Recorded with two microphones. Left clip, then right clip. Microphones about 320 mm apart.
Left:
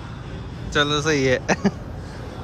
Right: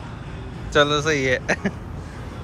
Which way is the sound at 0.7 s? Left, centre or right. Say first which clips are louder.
Right 2 dB; centre.